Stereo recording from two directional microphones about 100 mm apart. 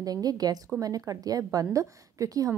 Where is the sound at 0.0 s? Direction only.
40° right (ahead or behind).